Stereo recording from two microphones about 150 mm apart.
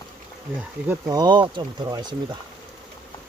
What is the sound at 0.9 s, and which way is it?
Speech, 25° right (ahead or behind).